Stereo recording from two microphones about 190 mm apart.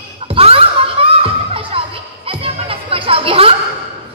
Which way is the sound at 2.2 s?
30° right (ahead or behind).